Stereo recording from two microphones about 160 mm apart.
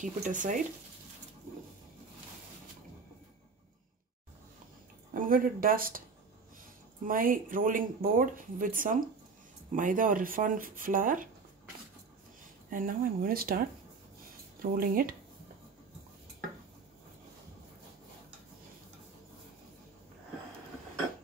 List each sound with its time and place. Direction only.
0.0 s speech: 55° right (ahead or behind)
5.1 s speech: 60° right (ahead or behind)
7.1 s speech: 60° right (ahead or behind)
12.6 s speech: 60° right (ahead or behind)
14.6 s speech: 65° right (ahead or behind)